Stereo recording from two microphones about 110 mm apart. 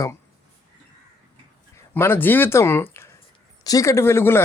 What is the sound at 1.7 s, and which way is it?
Speech, 20° left (ahead or behind).